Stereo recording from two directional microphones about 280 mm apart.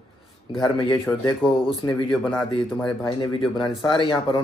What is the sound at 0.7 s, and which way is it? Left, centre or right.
Speech, centre.